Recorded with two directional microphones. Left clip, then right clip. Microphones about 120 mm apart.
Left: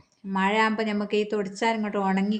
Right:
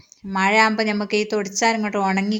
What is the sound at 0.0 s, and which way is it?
Speech, 25° right (ahead or behind).